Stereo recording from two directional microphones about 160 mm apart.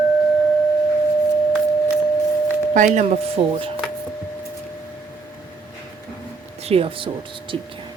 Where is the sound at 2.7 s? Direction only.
45° right (ahead or behind).